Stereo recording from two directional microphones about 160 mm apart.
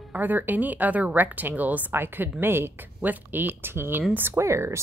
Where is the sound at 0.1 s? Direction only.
10° right (ahead or behind).